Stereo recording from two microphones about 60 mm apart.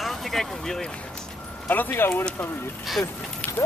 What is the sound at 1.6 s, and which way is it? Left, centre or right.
Speech, left.